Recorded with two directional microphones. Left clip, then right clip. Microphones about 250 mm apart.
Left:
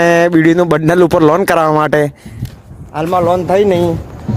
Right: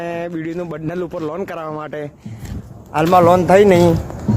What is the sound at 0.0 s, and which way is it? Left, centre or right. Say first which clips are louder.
Speech: left 15 dB; left.